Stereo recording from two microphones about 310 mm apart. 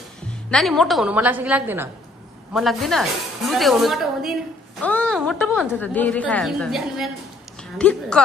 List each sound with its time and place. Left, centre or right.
0.5 s a woman's voice: centre